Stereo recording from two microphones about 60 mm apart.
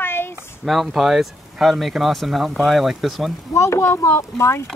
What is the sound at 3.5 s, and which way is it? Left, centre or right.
Speech, left.